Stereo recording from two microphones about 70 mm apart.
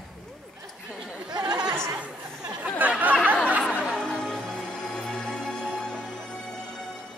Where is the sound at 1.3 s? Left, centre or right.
Right.